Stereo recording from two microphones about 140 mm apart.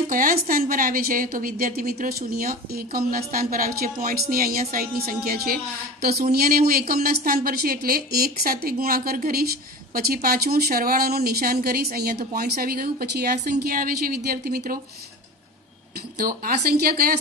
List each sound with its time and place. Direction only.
0.1 s a woman's voice: 85° right
16.2 s a woman's voice: 90° right